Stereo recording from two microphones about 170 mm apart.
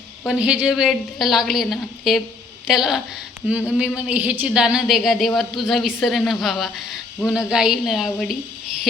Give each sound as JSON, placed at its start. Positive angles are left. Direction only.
{"t": 0.3, "sound": "speech", "side_deg": -5}
{"t": 3.4, "sound": "a sound", "side_deg": -10}
{"t": 3.8, "sound": "speech", "side_deg": -5}